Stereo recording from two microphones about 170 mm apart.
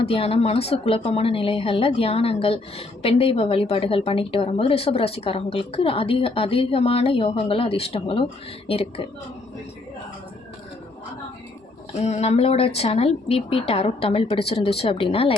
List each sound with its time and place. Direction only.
0.0 s a woman's voice: 35° left (ahead or behind)
11.9 s a woman's voice: 40° left (ahead or behind)